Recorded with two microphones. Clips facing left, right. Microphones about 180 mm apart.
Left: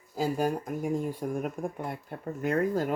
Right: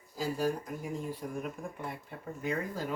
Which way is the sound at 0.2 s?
55° left (ahead or behind).